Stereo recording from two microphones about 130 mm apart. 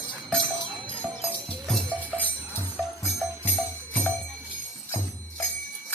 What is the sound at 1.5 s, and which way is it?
Music, 5° left (ahead or behind).